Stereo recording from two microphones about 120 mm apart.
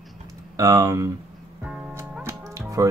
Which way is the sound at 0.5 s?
30° right (ahead or behind).